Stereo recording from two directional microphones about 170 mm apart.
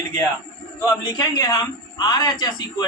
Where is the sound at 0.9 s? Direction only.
20° left (ahead or behind).